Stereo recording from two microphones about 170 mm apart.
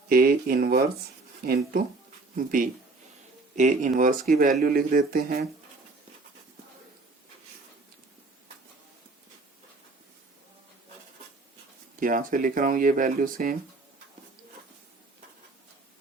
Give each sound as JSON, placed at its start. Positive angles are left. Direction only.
{"t": 0.1, "sound": "speech", "side_deg": -60}
{"t": 2.3, "sound": "speech", "side_deg": -50}
{"t": 11.9, "sound": "speech", "side_deg": -55}